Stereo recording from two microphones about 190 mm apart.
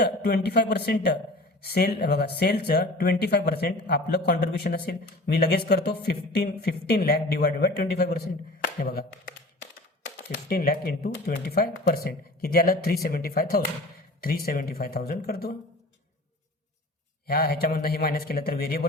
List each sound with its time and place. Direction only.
0.0 s speech: 60° left (ahead or behind)
10.5 s speech: 55° left (ahead or behind)
17.2 s speech: 55° left (ahead or behind)